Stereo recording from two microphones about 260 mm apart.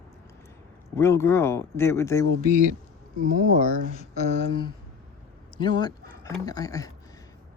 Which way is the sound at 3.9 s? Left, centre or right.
Left.